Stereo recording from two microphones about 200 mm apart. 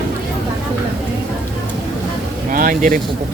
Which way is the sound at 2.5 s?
45° right (ahead or behind).